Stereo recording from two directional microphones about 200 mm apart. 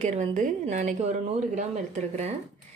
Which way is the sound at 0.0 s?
35° right (ahead or behind).